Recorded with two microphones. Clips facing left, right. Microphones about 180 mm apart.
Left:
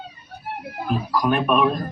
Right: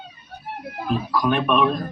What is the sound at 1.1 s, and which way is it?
Speech, 5° left (ahead or behind).